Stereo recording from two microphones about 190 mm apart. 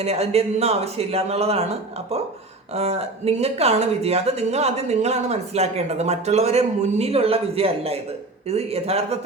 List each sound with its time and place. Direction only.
0.0 s speech: 35° right (ahead or behind)